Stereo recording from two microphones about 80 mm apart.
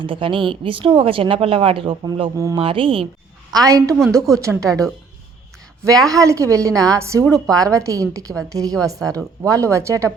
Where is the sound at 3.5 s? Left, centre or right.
Right.